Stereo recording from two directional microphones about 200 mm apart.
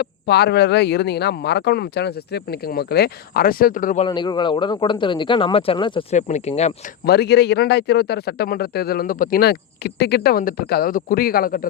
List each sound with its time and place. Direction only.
0.0 s speech: 55° left (ahead or behind)
4.0 s speech: 20° left (ahead or behind)
7.0 s speech: 55° left (ahead or behind)